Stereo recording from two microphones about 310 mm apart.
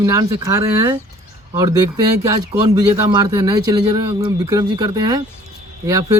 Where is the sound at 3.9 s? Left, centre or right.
Right.